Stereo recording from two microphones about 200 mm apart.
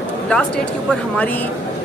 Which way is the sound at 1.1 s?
5° left (ahead or behind).